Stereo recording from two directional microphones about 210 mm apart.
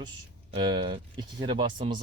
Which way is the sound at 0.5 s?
25° right (ahead or behind).